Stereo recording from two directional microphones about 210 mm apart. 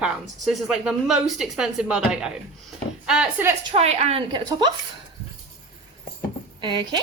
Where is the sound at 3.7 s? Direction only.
30° right (ahead or behind).